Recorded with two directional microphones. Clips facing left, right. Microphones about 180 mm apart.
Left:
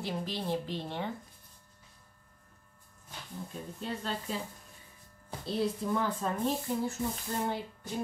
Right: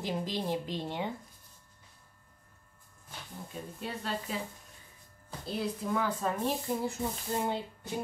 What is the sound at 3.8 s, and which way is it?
Speech, 5° right (ahead or behind).